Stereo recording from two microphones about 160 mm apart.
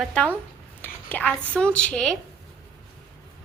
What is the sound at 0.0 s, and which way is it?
Speech, 5° left (ahead or behind).